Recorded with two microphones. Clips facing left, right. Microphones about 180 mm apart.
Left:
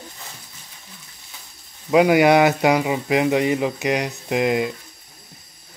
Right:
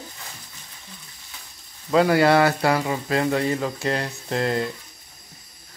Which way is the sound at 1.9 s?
15° left (ahead or behind).